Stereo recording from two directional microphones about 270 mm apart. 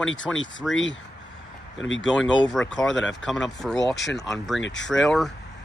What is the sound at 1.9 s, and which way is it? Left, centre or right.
Speech, centre.